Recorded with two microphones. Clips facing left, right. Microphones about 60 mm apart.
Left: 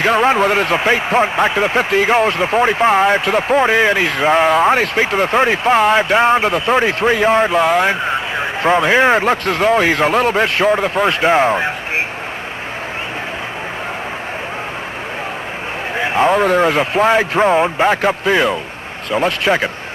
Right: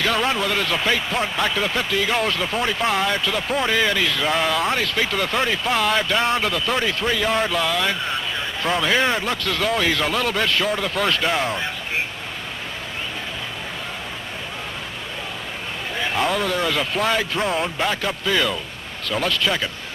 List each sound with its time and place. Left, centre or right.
0.0 s speech: left
16.0 s speech: left